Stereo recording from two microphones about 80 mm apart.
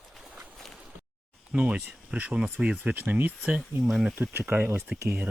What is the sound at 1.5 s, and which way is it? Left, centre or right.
Speech, centre.